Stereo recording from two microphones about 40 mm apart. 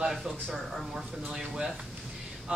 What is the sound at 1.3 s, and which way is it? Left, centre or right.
Speech, right.